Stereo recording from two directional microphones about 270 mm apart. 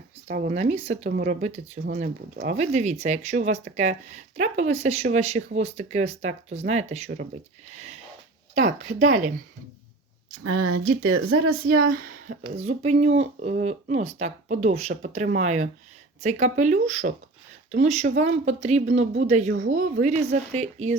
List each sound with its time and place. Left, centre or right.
0.3 s speech: right
10.4 s speech: right
11.9 s speech: right